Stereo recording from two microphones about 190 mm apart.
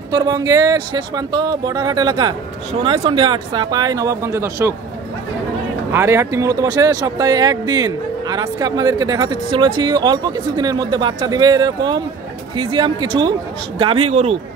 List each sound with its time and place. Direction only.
0.1 s speech: 20° right (ahead or behind)
5.9 s speech: 15° right (ahead or behind); by 14.3 s 30° right (ahead or behind)